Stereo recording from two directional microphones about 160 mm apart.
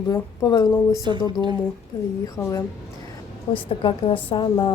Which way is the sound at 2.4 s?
20° left (ahead or behind).